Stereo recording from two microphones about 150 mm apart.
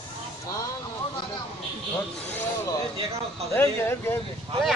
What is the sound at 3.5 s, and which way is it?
Speech, 15° left (ahead or behind).